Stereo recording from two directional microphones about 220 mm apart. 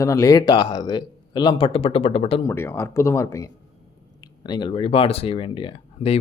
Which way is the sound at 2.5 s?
10° left (ahead or behind).